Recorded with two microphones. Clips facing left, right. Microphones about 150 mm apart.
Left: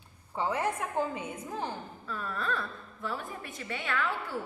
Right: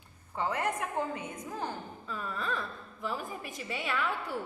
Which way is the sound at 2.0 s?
10° right (ahead or behind).